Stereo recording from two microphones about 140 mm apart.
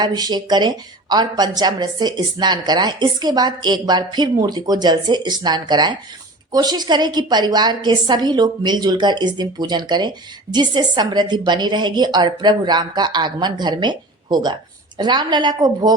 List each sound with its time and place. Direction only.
0.0 s a woman's voice: 30° right (ahead or behind)